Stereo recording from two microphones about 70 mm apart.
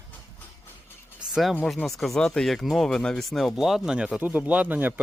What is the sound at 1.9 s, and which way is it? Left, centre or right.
Speech, centre.